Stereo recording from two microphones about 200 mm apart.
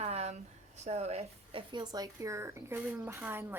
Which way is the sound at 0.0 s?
30° right (ahead or behind).